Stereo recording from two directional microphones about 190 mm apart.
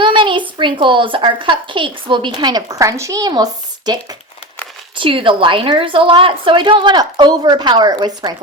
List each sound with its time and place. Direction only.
0.0 s a woman's voice: 25° right (ahead or behind)
4.9 s a woman's voice: 25° right (ahead or behind)